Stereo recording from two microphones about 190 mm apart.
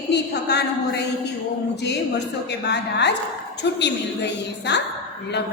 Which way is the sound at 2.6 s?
65° left (ahead or behind).